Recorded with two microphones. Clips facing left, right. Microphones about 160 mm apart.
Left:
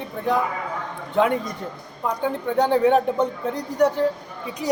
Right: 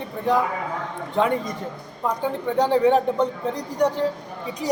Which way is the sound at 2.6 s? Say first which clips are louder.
Even; 5° left (ahead or behind).